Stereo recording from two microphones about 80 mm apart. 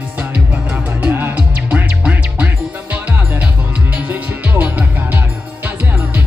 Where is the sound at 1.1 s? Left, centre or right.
Right.